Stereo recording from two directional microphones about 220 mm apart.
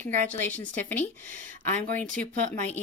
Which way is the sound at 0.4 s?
5° left (ahead or behind).